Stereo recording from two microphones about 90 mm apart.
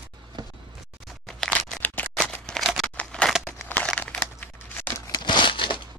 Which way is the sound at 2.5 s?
Centre (ahead or behind).